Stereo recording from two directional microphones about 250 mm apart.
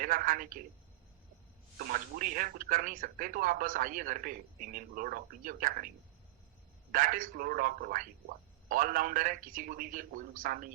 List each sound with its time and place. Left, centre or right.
0.0 s speech: right
1.8 s speech: right
6.9 s speech: right